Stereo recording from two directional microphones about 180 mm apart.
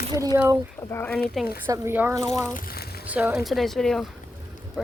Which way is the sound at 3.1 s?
10° right (ahead or behind).